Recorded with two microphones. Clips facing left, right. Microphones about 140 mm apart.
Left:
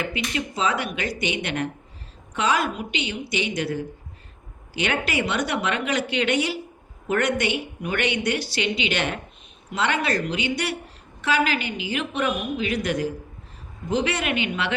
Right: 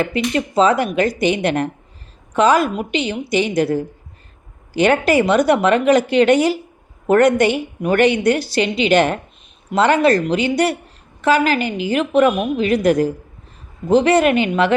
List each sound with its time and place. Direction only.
0.0 s a woman's voice: 45° right (ahead or behind)